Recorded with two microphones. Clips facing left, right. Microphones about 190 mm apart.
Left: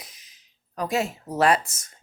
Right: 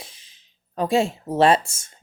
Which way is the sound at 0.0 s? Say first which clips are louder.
Right 5 dB; 30° right (ahead or behind).